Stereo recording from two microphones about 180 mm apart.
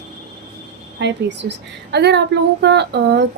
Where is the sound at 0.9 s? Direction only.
75° right (ahead or behind).